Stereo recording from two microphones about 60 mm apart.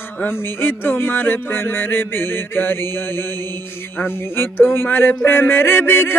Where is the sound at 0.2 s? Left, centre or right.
Left.